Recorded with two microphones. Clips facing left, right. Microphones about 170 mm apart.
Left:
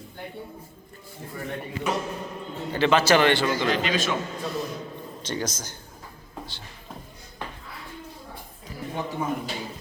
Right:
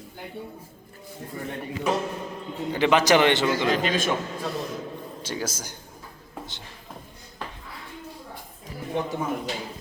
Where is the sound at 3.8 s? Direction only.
50° right (ahead or behind).